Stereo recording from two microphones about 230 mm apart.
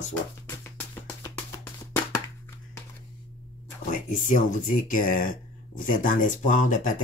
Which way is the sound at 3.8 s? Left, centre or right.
Left.